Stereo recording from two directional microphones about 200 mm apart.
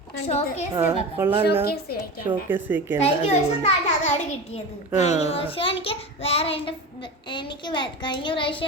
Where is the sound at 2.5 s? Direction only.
10° right (ahead or behind).